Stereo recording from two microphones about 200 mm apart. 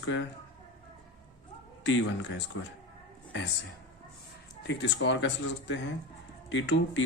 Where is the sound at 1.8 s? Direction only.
65° left (ahead or behind).